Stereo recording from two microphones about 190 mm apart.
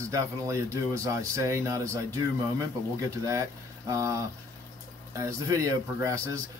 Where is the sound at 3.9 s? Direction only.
20° right (ahead or behind).